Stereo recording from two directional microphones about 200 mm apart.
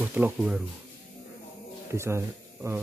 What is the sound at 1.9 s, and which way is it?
Speech, 15° right (ahead or behind).